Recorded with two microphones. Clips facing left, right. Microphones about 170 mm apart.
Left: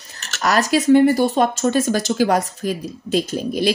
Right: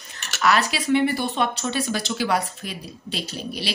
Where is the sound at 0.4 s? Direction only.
40° left (ahead or behind).